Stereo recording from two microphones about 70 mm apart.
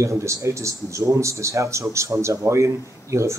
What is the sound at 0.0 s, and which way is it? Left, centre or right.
Speech, right.